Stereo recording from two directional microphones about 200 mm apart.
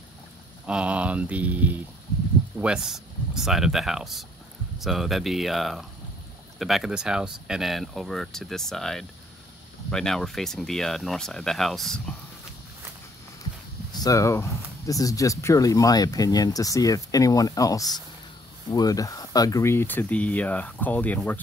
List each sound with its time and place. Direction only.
0.7 s speech: 5° right (ahead or behind)
13.9 s speech: 15° left (ahead or behind)